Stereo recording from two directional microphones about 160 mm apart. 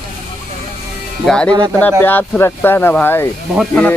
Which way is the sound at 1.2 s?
5° left (ahead or behind).